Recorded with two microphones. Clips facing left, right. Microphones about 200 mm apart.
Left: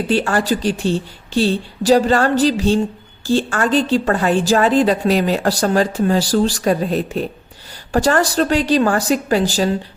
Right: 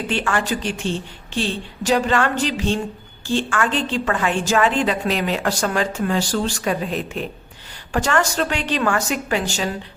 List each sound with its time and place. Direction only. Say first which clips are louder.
0.1 s a woman's voice: left 6 dB; 35° left (ahead or behind)